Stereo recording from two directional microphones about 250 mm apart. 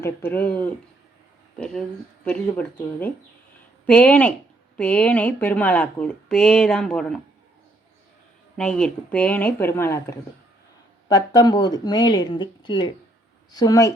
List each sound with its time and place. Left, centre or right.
0.0 s speech: centre
8.5 s speech: centre